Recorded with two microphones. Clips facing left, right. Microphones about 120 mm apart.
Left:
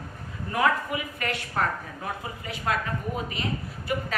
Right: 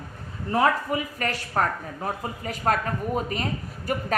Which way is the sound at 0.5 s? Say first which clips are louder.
Right 3 dB; 35° right (ahead or behind).